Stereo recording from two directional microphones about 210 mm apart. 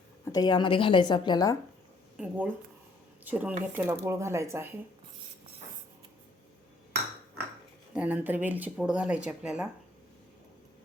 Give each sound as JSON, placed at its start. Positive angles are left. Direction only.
{"t": 0.3, "sound": "speech", "side_deg": 20}
{"t": 2.1, "sound": "speech", "side_deg": -5}
{"t": 7.9, "sound": "speech", "side_deg": -10}